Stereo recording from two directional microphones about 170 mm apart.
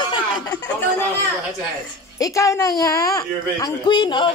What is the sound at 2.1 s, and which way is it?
Speech, 20° left (ahead or behind).